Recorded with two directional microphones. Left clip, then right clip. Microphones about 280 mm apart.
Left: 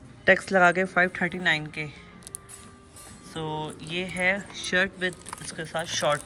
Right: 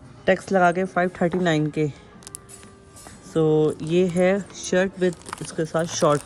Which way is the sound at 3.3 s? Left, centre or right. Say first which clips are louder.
Right 14 dB; right.